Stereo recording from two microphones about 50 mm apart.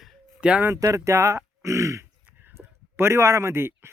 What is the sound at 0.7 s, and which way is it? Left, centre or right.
Speech, right.